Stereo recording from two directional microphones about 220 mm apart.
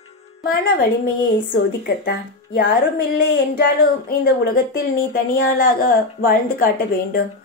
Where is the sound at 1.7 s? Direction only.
45° left (ahead or behind).